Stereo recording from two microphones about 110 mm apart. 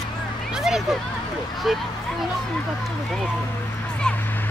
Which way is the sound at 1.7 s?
Centre (ahead or behind).